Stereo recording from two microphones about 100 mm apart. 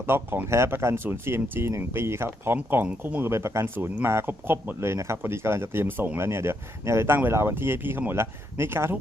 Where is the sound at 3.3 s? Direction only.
25° right (ahead or behind).